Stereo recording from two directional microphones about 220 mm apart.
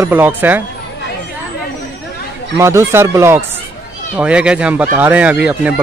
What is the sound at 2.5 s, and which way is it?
Speech, 10° right (ahead or behind).